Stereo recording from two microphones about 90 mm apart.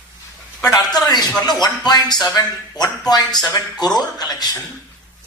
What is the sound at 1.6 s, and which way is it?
Speech, 50° left (ahead or behind).